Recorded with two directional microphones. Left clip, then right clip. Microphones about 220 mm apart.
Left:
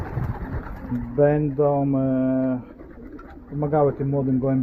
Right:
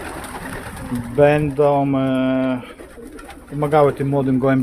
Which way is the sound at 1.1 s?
15° right (ahead or behind).